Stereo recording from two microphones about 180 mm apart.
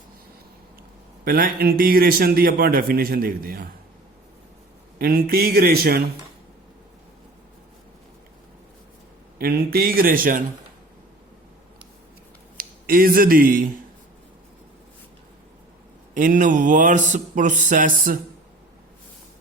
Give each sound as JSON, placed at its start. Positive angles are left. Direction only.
{"t": 1.2, "sound": "a man's voice", "side_deg": -55}
{"t": 4.9, "sound": "a man's voice", "side_deg": -55}
{"t": 9.4, "sound": "a man's voice", "side_deg": -60}
{"t": 12.5, "sound": "speech", "side_deg": -55}
{"t": 16.1, "sound": "speech", "side_deg": -45}